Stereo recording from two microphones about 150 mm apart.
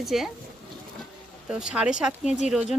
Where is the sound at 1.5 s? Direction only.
5° right (ahead or behind).